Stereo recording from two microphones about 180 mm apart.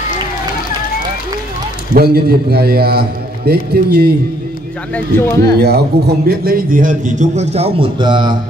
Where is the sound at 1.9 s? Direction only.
60° right (ahead or behind).